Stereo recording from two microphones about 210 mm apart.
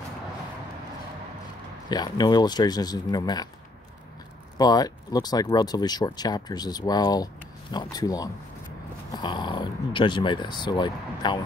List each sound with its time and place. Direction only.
1.9 s speech: 20° left (ahead or behind)
4.6 s speech: 20° left (ahead or behind)